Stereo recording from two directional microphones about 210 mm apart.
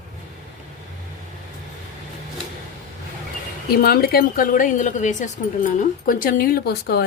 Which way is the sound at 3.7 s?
45° left (ahead or behind).